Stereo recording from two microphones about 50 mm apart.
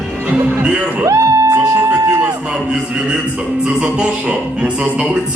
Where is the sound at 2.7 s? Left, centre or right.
Centre.